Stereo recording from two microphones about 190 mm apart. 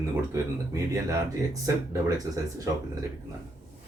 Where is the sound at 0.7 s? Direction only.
20° right (ahead or behind).